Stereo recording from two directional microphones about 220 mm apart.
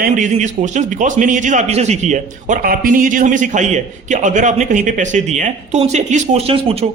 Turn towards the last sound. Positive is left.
turn(degrees=-25)  # may be behind; listen again after turning